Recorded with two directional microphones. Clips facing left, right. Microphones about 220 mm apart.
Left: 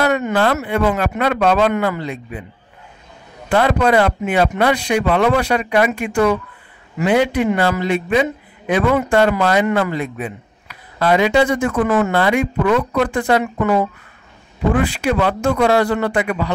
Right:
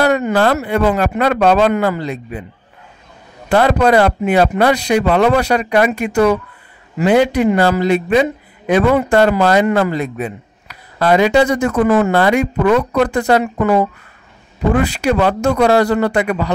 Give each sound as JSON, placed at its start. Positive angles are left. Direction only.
{"t": 0.0, "sound": "speech", "side_deg": -35}
{"t": 3.4, "sound": "speech", "side_deg": -40}